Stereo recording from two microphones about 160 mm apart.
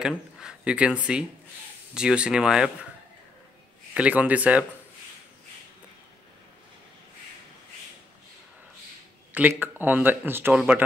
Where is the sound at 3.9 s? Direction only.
10° right (ahead or behind).